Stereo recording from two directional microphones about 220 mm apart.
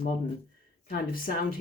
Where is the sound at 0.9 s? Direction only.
40° left (ahead or behind).